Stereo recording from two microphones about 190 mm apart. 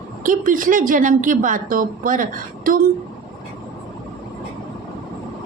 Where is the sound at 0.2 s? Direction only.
45° right (ahead or behind).